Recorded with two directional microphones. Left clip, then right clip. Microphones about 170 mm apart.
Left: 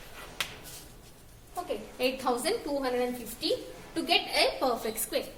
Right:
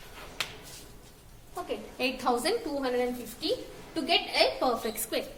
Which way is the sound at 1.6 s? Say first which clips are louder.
Left 1 dB; 30° right (ahead or behind).